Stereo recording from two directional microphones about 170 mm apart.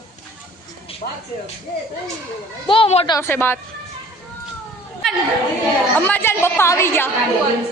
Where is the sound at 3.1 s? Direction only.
15° left (ahead or behind).